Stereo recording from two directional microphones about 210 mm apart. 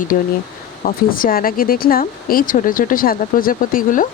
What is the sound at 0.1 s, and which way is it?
Speech, 40° left (ahead or behind).